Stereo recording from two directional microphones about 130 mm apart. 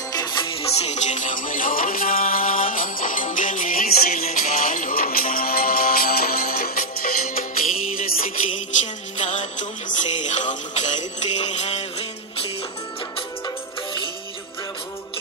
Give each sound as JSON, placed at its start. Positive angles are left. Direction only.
{"t": 0.1, "sound": "music", "side_deg": 35}
{"t": 9.2, "sound": "music", "side_deg": 65}